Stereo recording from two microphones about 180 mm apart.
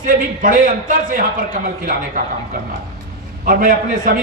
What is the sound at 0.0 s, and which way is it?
A man's voice, 50° right (ahead or behind).